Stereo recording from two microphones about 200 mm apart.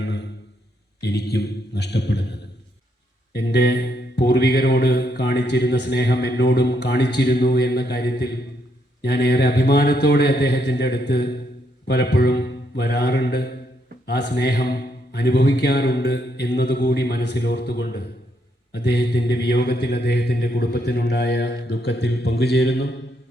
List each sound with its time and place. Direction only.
0.0 s a sound: 60° left (ahead or behind)
1.0 s mantra: 55° left (ahead or behind)
9.0 s a man's voice: 55° left (ahead or behind)
18.7 s mantra: 55° left (ahead or behind)